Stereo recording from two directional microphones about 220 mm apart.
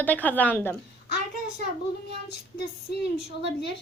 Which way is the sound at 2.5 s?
45° left (ahead or behind).